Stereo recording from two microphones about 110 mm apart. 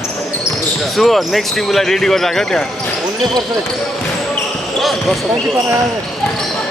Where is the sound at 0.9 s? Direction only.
Centre (ahead or behind).